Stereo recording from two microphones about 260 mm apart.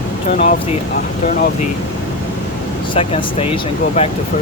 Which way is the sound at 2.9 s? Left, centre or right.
Left.